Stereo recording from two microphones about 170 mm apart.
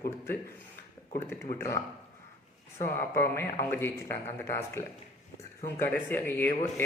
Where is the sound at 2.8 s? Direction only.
15° left (ahead or behind).